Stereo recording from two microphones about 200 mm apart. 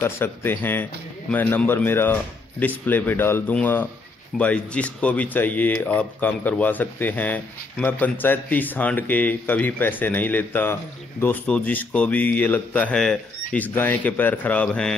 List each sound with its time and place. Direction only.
0.0 s speech: 10° left (ahead or behind)